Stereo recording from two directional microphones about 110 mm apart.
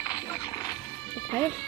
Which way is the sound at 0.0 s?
35° left (ahead or behind).